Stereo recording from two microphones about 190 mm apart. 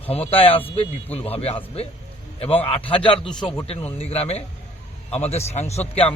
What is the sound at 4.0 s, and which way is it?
A man's voice, 30° left (ahead or behind).